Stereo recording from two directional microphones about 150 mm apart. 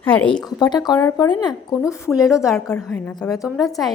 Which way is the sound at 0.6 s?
25° left (ahead or behind).